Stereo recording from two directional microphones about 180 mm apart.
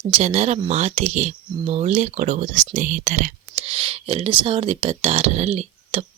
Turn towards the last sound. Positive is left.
turn(degrees=-35)  # may be behind; listen again after turning